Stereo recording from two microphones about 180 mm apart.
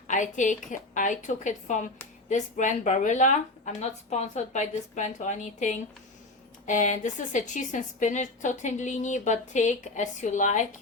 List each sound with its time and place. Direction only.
0.1 s a woman's voice: 45° left (ahead or behind)